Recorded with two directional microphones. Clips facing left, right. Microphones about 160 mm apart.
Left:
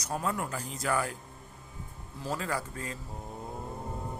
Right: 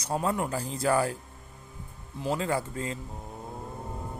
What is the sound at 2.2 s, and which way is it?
Speech, 25° right (ahead or behind).